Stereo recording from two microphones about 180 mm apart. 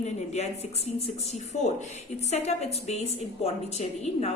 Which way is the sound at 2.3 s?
35° left (ahead or behind).